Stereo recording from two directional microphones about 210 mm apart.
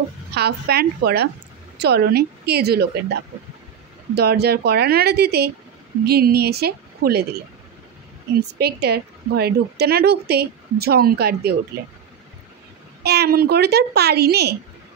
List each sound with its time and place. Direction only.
0.3 s a woman's voice: 50° right (ahead or behind)
8.4 s a woman's voice: 50° right (ahead or behind)
13.0 s a woman's voice: 50° right (ahead or behind)